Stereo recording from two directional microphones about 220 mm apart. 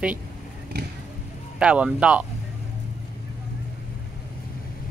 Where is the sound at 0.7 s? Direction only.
45° right (ahead or behind).